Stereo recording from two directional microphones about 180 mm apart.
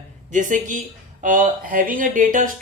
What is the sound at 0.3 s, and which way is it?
A man's voice, 45° right (ahead or behind).